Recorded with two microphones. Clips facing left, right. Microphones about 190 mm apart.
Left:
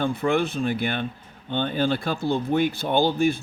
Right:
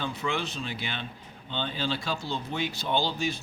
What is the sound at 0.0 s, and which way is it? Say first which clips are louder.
Speech: left 9 dB; 55° left (ahead or behind).